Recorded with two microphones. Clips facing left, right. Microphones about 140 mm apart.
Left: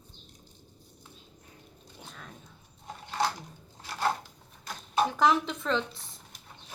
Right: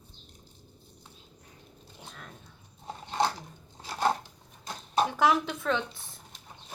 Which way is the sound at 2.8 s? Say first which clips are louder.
Right 2 dB; 25° right (ahead or behind).